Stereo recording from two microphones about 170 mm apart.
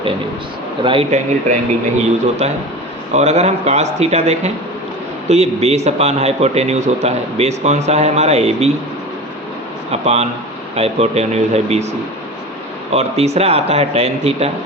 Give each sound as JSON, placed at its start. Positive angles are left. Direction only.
{"t": 0.8, "sound": "speech", "side_deg": -30}
{"t": 2.0, "sound": "a man's voice", "side_deg": -40}
{"t": 9.9, "sound": "a man's voice", "side_deg": -40}